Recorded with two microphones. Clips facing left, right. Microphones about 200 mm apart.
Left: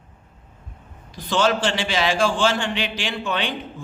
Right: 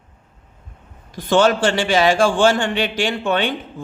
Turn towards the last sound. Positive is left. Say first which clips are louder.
# right 6 dB
turn(degrees=-45)  # may be behind; listen again after turning